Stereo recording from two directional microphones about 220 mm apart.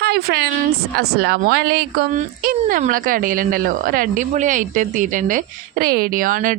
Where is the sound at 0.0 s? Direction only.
45° right (ahead or behind).